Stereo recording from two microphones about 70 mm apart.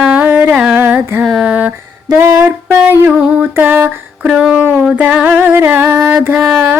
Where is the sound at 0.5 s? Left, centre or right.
Centre.